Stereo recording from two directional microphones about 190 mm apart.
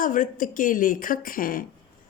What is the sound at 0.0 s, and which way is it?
A woman's voice, 45° left (ahead or behind).